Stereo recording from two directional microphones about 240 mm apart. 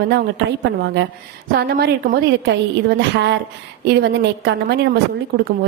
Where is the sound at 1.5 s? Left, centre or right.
Right.